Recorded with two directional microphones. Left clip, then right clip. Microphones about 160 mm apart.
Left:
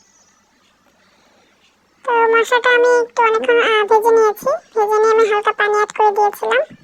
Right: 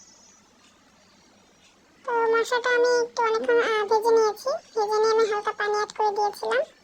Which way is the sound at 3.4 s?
45° left (ahead or behind).